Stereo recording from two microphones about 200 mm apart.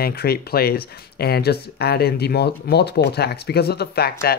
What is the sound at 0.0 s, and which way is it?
Speech, 50° left (ahead or behind).